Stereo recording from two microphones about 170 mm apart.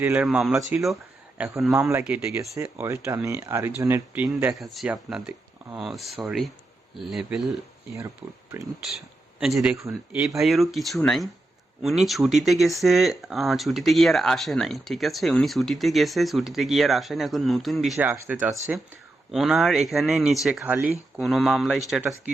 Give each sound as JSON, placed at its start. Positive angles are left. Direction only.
{"t": 0.0, "sound": "speech", "side_deg": -10}
{"t": 9.4, "sound": "speech", "side_deg": 0}
{"t": 9.7, "sound": "speech", "side_deg": -15}
{"t": 10.4, "sound": "speech", "side_deg": 0}
{"t": 18.1, "sound": "speech", "side_deg": -10}
{"t": 19.3, "sound": "speech", "side_deg": 0}